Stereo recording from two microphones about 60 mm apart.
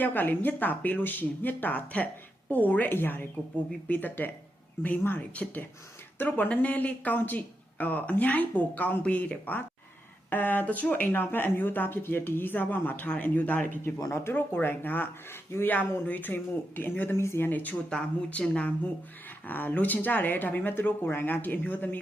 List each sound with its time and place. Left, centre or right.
0.0 s speech: left
11.0 s speech: left
17.2 s speech: left
17.4 s speech: left
17.8 s speech: centre
19.5 s speech: left